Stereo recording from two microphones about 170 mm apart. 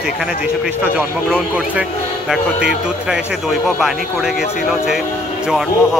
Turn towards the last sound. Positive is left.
turn(degrees=0)  # may be behind; listen again after turning